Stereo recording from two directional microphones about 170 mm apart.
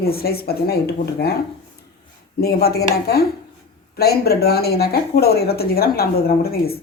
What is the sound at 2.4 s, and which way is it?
Speech, 65° left (ahead or behind).